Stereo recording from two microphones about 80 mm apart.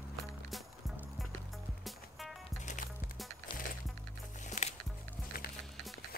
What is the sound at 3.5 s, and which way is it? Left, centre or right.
Music, left.